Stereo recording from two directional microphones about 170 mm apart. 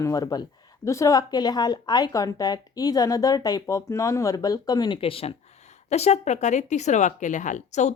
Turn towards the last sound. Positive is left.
turn(degrees=45)  # may be behind; listen again after turning